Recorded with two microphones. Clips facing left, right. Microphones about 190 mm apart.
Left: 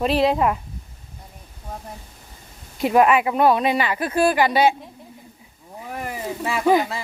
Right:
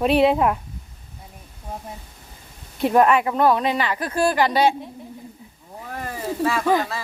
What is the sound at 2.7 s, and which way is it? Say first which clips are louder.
Speech: even; 5° left (ahead or behind).